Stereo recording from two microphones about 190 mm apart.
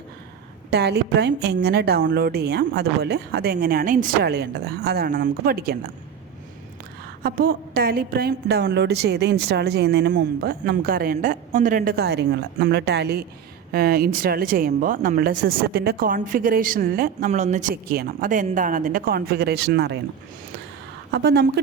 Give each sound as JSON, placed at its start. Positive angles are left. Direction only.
{"t": 0.7, "sound": "a woman's voice", "side_deg": -60}
{"t": 7.2, "sound": "a woman's voice", "side_deg": -50}
{"t": 21.1, "sound": "a woman's voice", "side_deg": -60}